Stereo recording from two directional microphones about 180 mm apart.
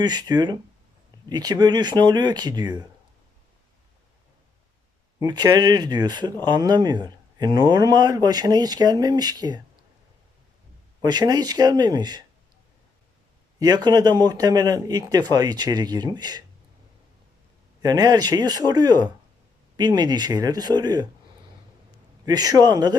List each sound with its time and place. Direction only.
0.0 s speech: 25° right (ahead or behind)
5.2 s speech: 20° right (ahead or behind)
11.0 s speech: 20° right (ahead or behind)
13.6 s speech: 20° right (ahead or behind)
17.8 s speech: 20° right (ahead or behind)
22.3 s speech: 20° right (ahead or behind)